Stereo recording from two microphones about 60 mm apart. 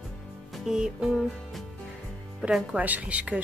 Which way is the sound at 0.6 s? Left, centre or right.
Centre.